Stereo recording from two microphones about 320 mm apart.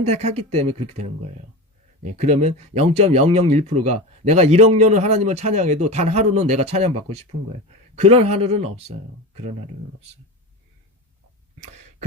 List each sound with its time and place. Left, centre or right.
0.0 s speech: centre